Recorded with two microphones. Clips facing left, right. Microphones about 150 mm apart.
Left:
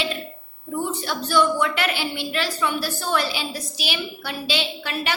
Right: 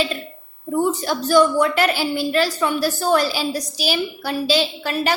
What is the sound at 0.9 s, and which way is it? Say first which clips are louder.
A woman's voice: right 7 dB; 40° right (ahead or behind).